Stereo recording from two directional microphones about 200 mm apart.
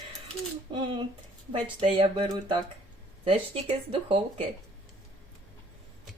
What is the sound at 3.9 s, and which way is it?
Speech, 25° right (ahead or behind).